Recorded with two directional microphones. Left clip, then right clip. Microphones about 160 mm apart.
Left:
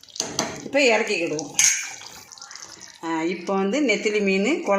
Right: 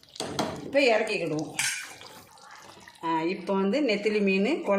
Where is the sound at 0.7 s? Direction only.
50° left (ahead or behind).